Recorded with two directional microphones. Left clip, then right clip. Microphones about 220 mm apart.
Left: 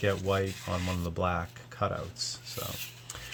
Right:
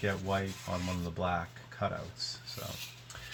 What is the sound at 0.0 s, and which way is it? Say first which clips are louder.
Speech: left 5 dB; 50° left (ahead or behind).